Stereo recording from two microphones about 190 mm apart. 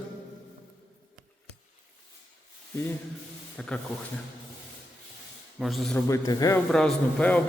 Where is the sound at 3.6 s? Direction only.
5° left (ahead or behind).